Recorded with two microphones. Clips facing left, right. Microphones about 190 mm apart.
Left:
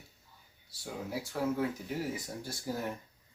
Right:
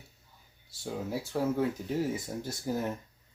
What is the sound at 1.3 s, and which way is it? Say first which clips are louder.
Speech: right 3 dB; 25° right (ahead or behind).